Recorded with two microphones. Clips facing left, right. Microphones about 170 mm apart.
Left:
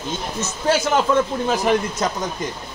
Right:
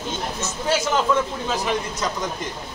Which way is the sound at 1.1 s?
55° left (ahead or behind).